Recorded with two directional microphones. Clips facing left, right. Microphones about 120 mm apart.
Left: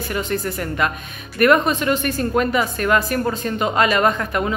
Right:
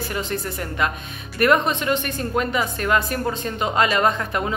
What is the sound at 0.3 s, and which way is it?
A woman's voice, 25° right (ahead or behind).